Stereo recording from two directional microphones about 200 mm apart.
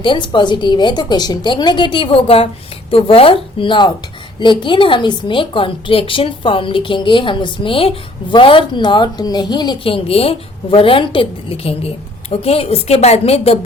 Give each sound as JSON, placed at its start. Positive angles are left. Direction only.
{"t": 0.0, "sound": "a woman's voice", "side_deg": 25}